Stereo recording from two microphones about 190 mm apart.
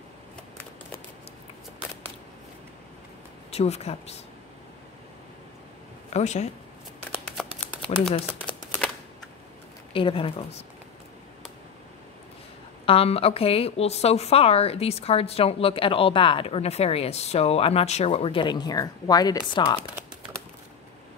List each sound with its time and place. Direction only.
3.5 s a woman's voice: 35° left (ahead or behind)
6.0 s speech: 35° left (ahead or behind)
9.9 s speech: 30° left (ahead or behind)
12.8 s a woman's voice: 30° left (ahead or behind)